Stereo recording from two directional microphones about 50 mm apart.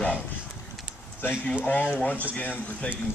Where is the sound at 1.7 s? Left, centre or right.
Left.